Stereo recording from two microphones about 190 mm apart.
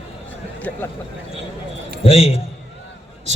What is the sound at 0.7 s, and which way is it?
Speech, 10° left (ahead or behind).